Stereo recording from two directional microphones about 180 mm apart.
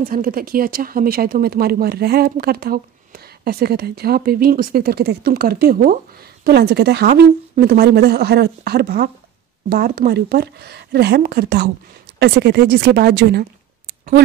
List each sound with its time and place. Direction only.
0.0 s speech: 50° right (ahead or behind)
6.4 s speech: 65° right (ahead or behind)
7.1 s speech: 55° right (ahead or behind)